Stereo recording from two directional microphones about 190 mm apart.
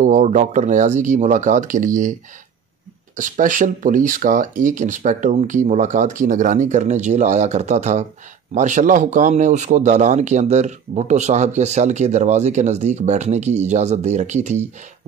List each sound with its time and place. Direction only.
0.0 s speech: 40° right (ahead or behind)
3.2 s speech: 40° right (ahead or behind)